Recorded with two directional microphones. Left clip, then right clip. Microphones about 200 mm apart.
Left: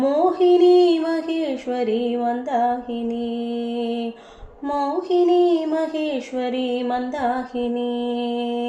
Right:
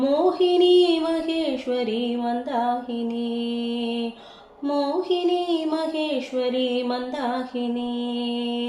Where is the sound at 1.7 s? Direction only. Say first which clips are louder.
Left 6 dB; 55° left (ahead or behind).